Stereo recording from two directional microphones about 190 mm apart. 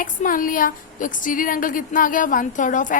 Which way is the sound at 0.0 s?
45° left (ahead or behind).